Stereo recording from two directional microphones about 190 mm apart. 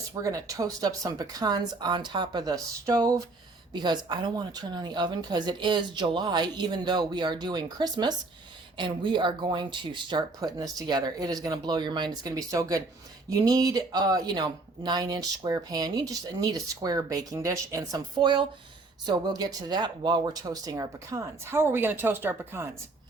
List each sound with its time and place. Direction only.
0.2 s speech: 15° right (ahead or behind)